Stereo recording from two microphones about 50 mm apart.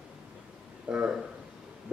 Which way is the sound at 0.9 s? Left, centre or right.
Right.